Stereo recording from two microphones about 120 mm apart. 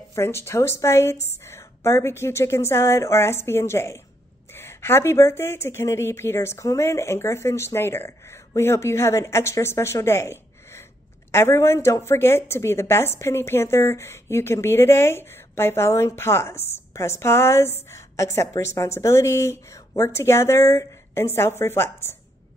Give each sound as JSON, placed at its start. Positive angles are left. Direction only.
{"t": 0.1, "sound": "a woman's voice", "side_deg": 20}